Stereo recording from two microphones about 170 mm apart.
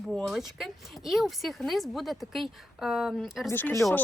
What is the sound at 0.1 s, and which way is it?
Speech, centre (ahead or behind).